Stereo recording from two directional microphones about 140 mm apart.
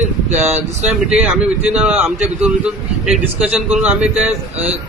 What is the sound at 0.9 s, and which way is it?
A man's voice, 5° right (ahead or behind).